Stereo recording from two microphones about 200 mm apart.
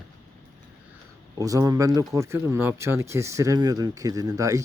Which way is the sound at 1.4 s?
15° right (ahead or behind).